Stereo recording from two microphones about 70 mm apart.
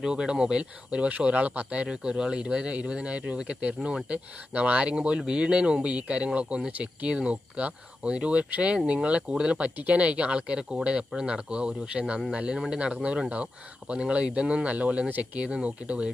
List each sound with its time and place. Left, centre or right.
0.0 s speech: centre